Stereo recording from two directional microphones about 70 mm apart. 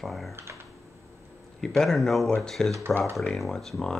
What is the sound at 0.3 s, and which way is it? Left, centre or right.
Speech, right.